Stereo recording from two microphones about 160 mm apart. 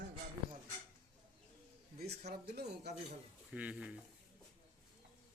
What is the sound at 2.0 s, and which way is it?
Speech, 85° right.